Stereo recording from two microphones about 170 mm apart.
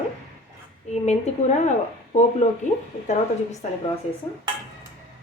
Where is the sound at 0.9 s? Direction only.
40° left (ahead or behind).